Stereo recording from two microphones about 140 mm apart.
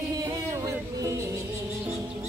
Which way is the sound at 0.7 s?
20° right (ahead or behind).